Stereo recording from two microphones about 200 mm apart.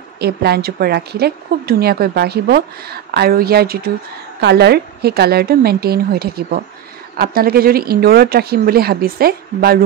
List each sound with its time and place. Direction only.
0.2 s a woman's voice: 55° right (ahead or behind)